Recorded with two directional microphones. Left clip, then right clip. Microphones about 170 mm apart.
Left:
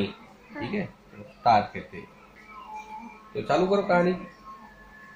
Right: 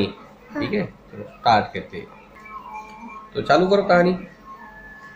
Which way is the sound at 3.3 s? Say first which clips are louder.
Right 7 dB; 10° left (ahead or behind).